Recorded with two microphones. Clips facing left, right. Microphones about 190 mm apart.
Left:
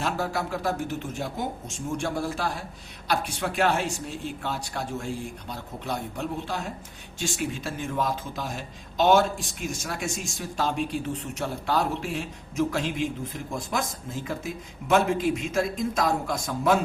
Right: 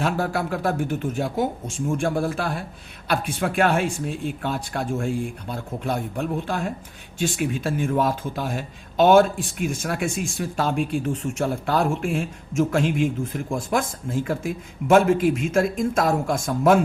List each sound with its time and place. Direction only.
0.0 s speech: 55° right (ahead or behind)